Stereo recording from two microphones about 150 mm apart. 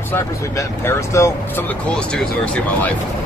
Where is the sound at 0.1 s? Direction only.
20° left (ahead or behind).